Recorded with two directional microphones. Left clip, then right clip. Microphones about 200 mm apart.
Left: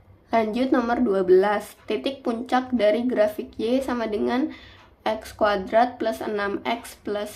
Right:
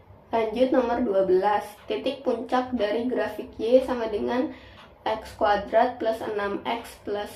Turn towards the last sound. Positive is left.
turn(degrees=35)  # may be behind; listen again after turning